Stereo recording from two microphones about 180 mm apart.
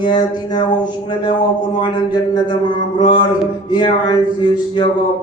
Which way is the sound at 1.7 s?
25° left (ahead or behind).